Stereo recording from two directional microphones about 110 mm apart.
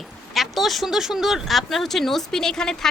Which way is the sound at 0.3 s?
Centre (ahead or behind).